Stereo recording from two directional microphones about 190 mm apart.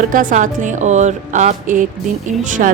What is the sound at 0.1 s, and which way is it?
A woman's voice, 45° right (ahead or behind).